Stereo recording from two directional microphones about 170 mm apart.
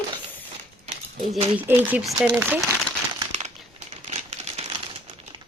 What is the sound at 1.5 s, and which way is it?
Speech, 10° right (ahead or behind).